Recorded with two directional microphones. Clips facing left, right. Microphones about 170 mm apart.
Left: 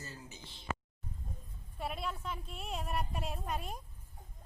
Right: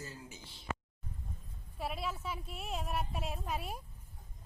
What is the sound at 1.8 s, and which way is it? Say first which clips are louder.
Speech: even; centre (ahead or behind).